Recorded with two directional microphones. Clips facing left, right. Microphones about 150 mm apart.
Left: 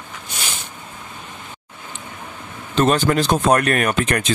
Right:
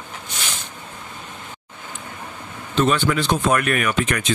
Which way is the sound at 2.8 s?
45° left (ahead or behind).